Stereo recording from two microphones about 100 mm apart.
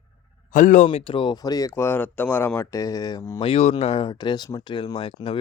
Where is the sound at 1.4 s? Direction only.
40° left (ahead or behind).